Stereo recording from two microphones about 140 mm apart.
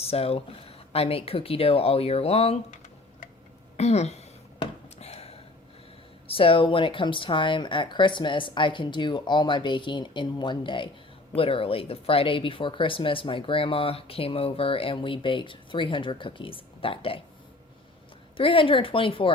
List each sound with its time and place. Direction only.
0.0 s speech: 45° left (ahead or behind)
3.8 s speech: 50° left (ahead or behind)
4.6 s a sound: 45° left (ahead or behind)
6.2 s speech: 40° left (ahead or behind)
18.3 s speech: 40° left (ahead or behind)